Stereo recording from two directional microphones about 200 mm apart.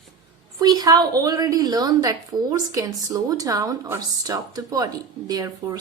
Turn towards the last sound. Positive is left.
turn(degrees=-20)  # may be behind; listen again after turning